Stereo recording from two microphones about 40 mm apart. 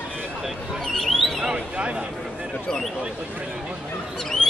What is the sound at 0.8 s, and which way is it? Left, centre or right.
Speech, centre.